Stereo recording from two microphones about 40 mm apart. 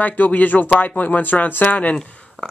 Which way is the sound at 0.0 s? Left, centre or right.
Left.